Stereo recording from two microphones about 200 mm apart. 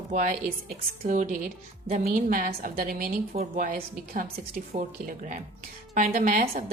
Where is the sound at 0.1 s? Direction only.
40° right (ahead or behind).